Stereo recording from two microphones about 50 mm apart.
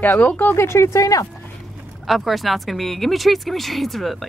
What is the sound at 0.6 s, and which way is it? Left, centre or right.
Speech, left.